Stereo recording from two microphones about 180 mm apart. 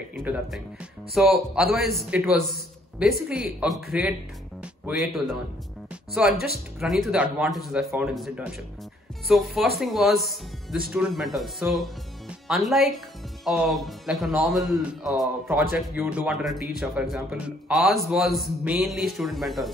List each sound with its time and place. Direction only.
0.1 s speech: 10° right (ahead or behind)
1.1 s a man's voice: centre (ahead or behind)
6.3 s speech: 60° left (ahead or behind)
6.8 s a man's voice: centre (ahead or behind)